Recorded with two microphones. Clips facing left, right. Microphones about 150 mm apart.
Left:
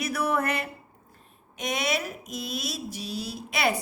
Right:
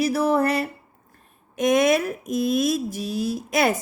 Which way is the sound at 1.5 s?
50° right (ahead or behind).